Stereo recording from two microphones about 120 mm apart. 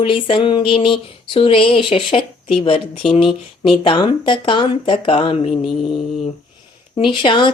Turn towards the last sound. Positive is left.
turn(degrees=40)  # may be behind; listen again after turning